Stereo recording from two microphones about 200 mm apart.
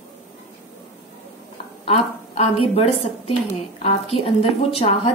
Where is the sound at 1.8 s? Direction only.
30° left (ahead or behind).